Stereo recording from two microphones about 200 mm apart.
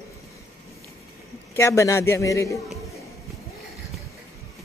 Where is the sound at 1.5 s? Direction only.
15° left (ahead or behind).